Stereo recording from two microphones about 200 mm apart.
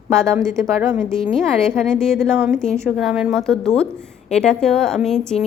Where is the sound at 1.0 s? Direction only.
Centre (ahead or behind).